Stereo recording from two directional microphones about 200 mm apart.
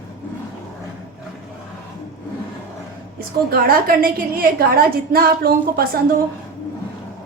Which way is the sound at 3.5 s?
45° right (ahead or behind).